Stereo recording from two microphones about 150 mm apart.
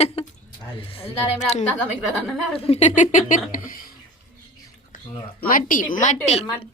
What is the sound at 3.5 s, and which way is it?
Speech, 70° left (ahead or behind).